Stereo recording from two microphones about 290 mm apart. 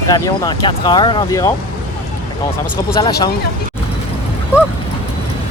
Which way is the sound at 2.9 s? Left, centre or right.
Centre.